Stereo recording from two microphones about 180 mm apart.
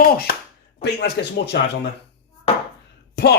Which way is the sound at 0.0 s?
55° left (ahead or behind).